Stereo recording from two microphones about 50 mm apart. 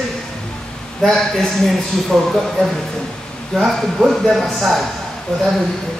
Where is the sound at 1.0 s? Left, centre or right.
Centre.